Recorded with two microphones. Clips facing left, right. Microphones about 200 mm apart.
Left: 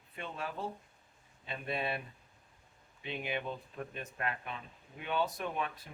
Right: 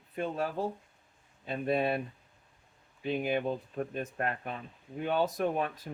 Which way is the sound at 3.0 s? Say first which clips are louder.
Right 8 dB; 45° right (ahead or behind).